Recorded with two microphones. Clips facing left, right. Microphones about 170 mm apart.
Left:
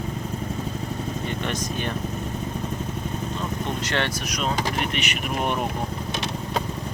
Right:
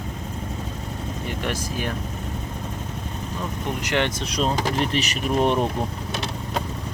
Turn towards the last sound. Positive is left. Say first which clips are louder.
# right 5 dB
turn(degrees=-30)  # may be behind; listen again after turning